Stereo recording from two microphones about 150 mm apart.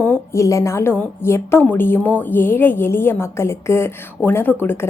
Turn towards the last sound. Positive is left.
turn(degrees=15)  # may be behind; listen again after turning